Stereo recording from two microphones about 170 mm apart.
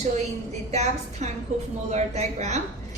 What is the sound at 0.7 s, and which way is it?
A woman's voice, 40° right (ahead or behind).